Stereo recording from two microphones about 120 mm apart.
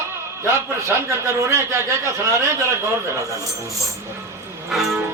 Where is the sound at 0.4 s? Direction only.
25° right (ahead or behind).